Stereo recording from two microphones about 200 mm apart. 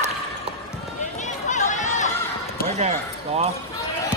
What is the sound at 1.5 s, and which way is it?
Chatter, 40° left (ahead or behind).